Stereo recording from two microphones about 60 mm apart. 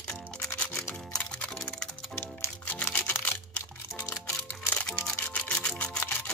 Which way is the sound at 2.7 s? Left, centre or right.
Left.